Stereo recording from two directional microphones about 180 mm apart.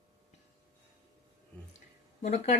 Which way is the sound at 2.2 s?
40° left (ahead or behind).